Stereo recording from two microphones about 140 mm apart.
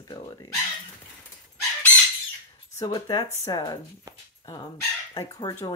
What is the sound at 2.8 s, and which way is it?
Speech, 25° left (ahead or behind).